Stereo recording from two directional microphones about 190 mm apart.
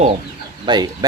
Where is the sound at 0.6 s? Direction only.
25° right (ahead or behind).